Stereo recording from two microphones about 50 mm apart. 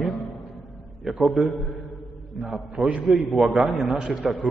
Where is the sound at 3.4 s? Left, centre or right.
Centre.